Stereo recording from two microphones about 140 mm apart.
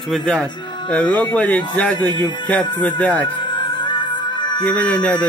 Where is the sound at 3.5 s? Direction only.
35° left (ahead or behind).